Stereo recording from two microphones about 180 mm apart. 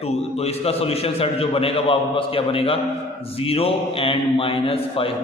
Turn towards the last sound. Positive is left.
turn(degrees=30)  # may be behind; listen again after turning